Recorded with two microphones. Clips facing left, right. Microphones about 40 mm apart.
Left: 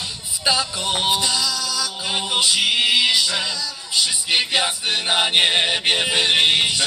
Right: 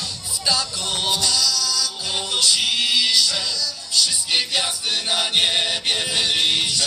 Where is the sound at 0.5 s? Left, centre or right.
Left.